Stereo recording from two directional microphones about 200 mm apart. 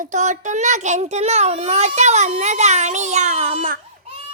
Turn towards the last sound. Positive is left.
turn(degrees=-40)  # may be behind; listen again after turning